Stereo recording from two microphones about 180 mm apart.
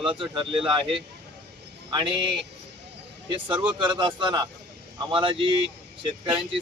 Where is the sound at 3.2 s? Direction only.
30° right (ahead or behind).